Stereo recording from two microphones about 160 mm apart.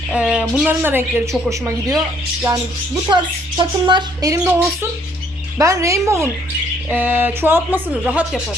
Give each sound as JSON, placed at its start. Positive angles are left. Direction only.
{"t": 0.1, "sound": "speech", "side_deg": -5}
{"t": 3.1, "sound": "speech", "side_deg": -30}